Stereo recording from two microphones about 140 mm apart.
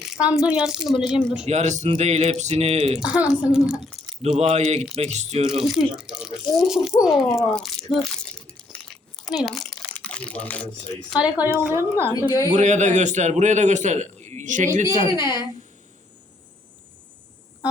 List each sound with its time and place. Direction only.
0.0 s a woman's voice: 5° right (ahead or behind)
1.5 s speech: 55° right (ahead or behind)
3.0 s a woman's voice: 5° right (ahead or behind)
4.4 s speech: 50° right (ahead or behind)
5.6 s speech: 5° right (ahead or behind)
9.1 s a sound: centre (ahead or behind)
11.3 s a woman's voice: 15° right (ahead or behind)
12.5 s a man's voice: 60° right (ahead or behind)
15.2 s a woman's voice: 20° right (ahead or behind)